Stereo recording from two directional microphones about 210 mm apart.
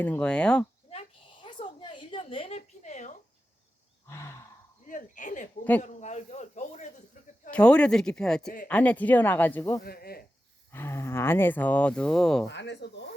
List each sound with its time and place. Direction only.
0.0 s speech: 5° left (ahead or behind)
0.9 s a sound: 25° left (ahead or behind)
4.0 s wild animals: 15° left (ahead or behind)
4.9 s speech: 40° left (ahead or behind)
7.5 s speech: 5° left (ahead or behind)
9.8 s speech: 45° left (ahead or behind)
10.7 s speech: 10° left (ahead or behind)
12.5 s speech: 55° left (ahead or behind)